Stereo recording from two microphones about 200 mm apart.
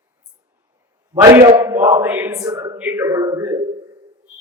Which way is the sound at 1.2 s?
15° right (ahead or behind).